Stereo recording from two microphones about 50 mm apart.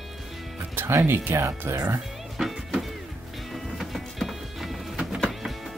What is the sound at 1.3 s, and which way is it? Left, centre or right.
Speech, right.